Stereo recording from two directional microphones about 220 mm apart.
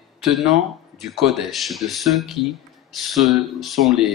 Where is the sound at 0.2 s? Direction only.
Centre (ahead or behind).